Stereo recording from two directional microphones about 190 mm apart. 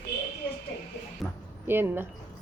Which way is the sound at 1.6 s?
10° right (ahead or behind).